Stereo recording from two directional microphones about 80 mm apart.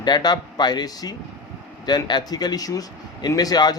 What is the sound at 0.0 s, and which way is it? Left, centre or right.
A man's voice, left.